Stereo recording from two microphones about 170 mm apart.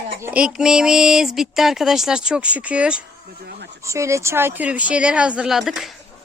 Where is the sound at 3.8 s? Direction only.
15° right (ahead or behind); by 5.9 s centre (ahead or behind).